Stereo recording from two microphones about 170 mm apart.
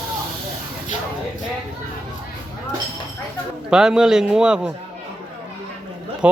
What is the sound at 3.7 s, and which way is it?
A man's voice, 5° right (ahead or behind).